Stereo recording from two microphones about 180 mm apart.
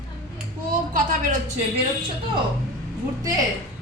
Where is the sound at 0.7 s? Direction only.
45° right (ahead or behind).